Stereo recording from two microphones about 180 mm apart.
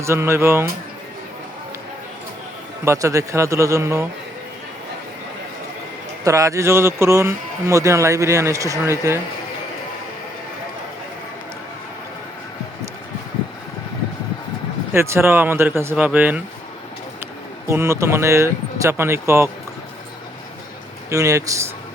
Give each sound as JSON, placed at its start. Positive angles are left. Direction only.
{"t": 0.0, "sound": "speech", "side_deg": -15}
{"t": 2.8, "sound": "speech", "side_deg": -15}
{"t": 6.2, "sound": "speech", "side_deg": -15}
{"t": 14.9, "sound": "speech", "side_deg": -15}
{"t": 17.7, "sound": "speech", "side_deg": -15}
{"t": 21.1, "sound": "speech", "side_deg": -15}